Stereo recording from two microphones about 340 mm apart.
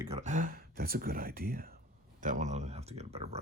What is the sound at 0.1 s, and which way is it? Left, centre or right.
Speech, right.